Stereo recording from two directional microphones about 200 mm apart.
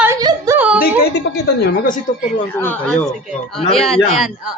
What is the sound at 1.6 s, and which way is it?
Speech, 45° left (ahead or behind).